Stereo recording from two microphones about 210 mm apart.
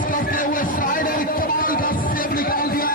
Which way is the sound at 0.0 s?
40° left (ahead or behind).